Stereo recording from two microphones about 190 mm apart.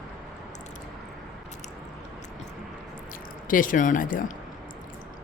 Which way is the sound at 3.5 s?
45° left (ahead or behind).